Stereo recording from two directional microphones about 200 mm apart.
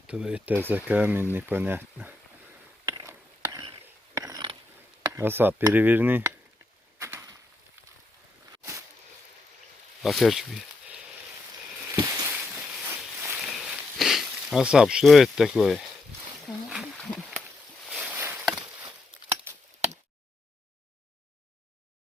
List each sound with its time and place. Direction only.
0.1 s speech: 5° right (ahead or behind)
2.8 s ratchet: 15° right (ahead or behind)
5.1 s speech: 10° right (ahead or behind)
7.0 s chop: 15° right (ahead or behind)
8.5 s a sound: 15° right (ahead or behind)
10.0 s speech: centre (ahead or behind)
11.9 s a sound: 15° right (ahead or behind)
18.2 s chop: 10° right (ahead or behind)